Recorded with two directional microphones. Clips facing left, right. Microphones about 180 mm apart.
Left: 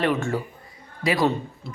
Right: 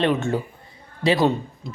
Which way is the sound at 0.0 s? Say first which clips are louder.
Right 2 dB; 20° right (ahead or behind).